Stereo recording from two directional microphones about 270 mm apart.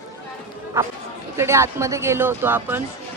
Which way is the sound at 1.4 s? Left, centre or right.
Centre.